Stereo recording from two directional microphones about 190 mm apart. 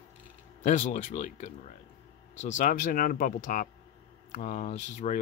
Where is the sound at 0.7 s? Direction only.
40° left (ahead or behind).